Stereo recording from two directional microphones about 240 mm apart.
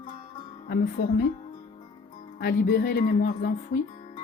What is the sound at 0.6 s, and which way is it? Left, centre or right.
Speech, left.